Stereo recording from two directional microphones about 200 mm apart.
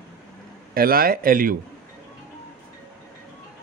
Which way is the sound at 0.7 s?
50° right (ahead or behind).